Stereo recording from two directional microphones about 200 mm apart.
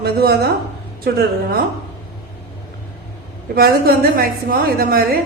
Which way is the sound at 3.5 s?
50° right (ahead or behind).